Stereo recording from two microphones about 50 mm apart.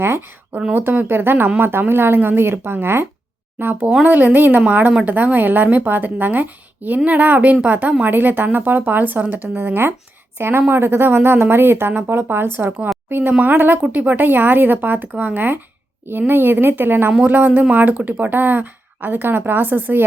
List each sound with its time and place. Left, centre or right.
0.0 s speech: right
3.6 s a woman's voice: right